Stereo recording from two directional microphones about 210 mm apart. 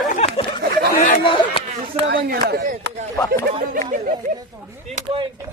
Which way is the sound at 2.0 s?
50° right (ahead or behind).